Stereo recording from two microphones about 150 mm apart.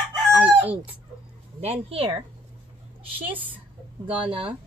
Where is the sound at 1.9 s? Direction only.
40° right (ahead or behind).